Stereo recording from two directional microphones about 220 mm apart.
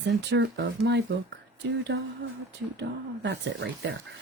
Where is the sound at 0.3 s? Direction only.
55° right (ahead or behind).